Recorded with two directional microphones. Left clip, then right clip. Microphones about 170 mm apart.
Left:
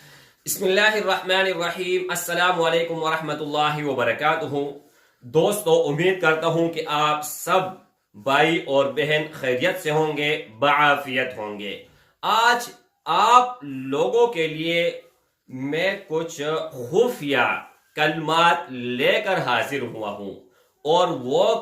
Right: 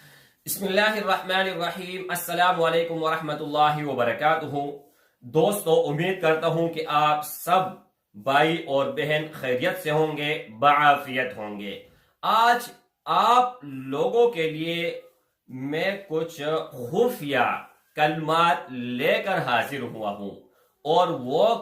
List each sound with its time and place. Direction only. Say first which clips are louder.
0.4 s speech: left 4 dB; 15° left (ahead or behind)